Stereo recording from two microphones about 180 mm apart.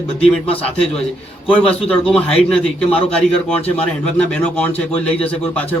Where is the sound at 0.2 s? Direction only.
30° left (ahead or behind).